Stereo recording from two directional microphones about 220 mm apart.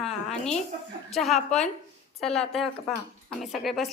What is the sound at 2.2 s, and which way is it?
A woman's voice, centre (ahead or behind).